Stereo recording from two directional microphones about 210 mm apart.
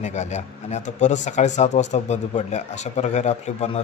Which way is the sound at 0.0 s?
35° left (ahead or behind).